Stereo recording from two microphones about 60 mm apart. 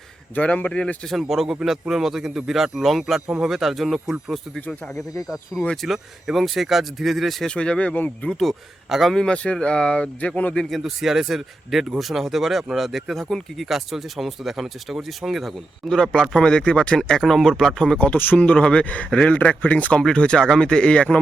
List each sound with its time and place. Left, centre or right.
0.3 s speech: left
1.2 s speech: centre
4.6 s speech: left
4.9 s speech: left
5.7 s speech: centre
7.4 s speech: centre
8.3 s speech: centre
9.1 s speech: centre
10.7 s speech: centre
15.9 s speech: centre
18.0 s speech: left
18.3 s speech: centre
20.0 s speech: centre